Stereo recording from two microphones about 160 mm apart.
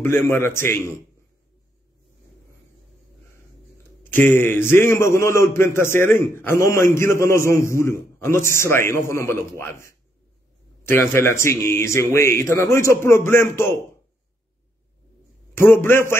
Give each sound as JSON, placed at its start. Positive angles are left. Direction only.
{"t": 0.0, "sound": "a man's voice", "side_deg": 15}
{"t": 4.0, "sound": "a man's voice", "side_deg": 10}
{"t": 15.5, "sound": "a man's voice", "side_deg": 15}